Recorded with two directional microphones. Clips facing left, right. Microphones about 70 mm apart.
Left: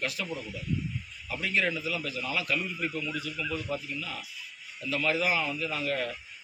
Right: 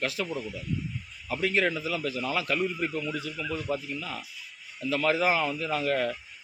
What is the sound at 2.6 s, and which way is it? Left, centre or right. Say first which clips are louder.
Speech: right 4 dB; right.